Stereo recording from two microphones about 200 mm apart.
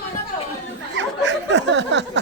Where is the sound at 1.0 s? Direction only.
60° right (ahead or behind).